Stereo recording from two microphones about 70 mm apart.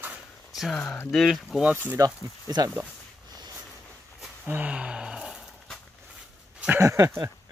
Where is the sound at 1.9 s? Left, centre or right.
Right.